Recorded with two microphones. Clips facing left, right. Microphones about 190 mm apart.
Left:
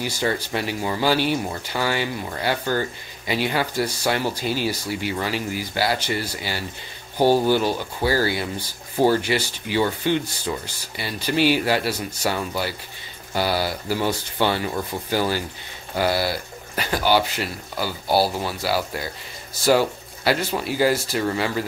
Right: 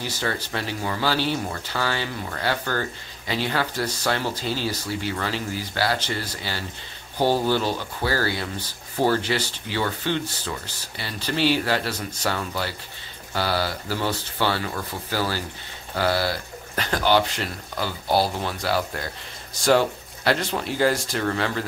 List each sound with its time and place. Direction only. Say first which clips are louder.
0.0 s speech: left 4 dB; 15° left (ahead or behind)